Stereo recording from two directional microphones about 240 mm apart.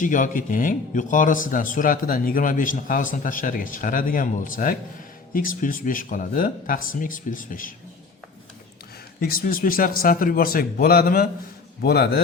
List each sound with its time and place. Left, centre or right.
0.0 s a man's voice: left
9.2 s a man's voice: left